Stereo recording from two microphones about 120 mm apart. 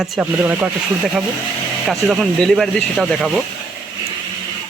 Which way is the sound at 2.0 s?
Centre (ahead or behind).